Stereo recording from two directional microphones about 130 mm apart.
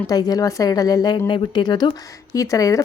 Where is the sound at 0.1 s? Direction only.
30° left (ahead or behind).